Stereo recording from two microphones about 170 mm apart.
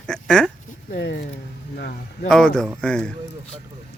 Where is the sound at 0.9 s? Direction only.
75° left (ahead or behind).